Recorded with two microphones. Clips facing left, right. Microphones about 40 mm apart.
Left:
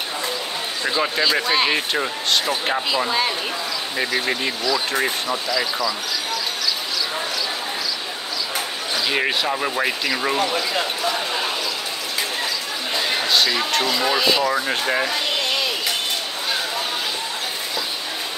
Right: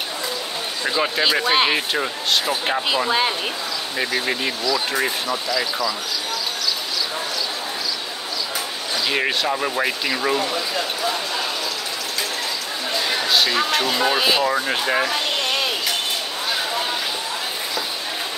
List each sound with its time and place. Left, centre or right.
0.8 s speech: centre
1.2 s speech: right
1.7 s speech: centre
4.0 s speech: centre
9.1 s speech: centre
13.3 s speech: centre
14.1 s speech: centre
14.5 s speech: centre